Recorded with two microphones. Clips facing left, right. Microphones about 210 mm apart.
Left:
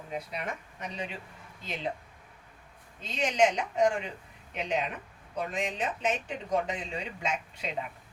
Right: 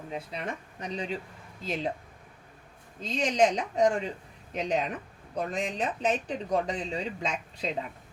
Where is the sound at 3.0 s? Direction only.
35° right (ahead or behind).